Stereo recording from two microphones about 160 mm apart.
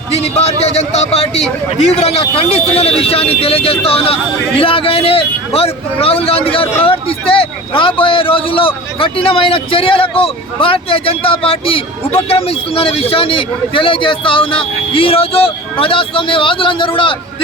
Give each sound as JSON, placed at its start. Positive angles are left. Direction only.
{"t": 0.1, "sound": "speech", "side_deg": 40}